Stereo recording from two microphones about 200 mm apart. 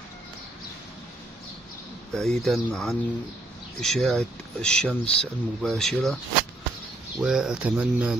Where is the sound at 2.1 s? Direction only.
Centre (ahead or behind).